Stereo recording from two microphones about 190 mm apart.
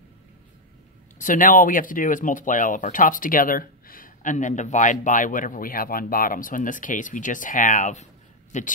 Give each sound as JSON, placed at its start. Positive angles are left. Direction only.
{"t": 1.2, "sound": "speech", "side_deg": 45}